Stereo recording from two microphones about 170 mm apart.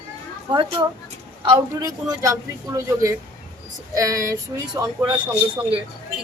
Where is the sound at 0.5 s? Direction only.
25° right (ahead or behind).